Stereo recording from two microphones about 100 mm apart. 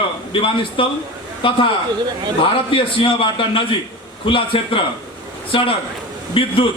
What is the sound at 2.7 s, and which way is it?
A man's voice, 60° left (ahead or behind).